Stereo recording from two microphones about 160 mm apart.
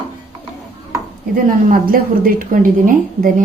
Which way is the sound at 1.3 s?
60° right (ahead or behind).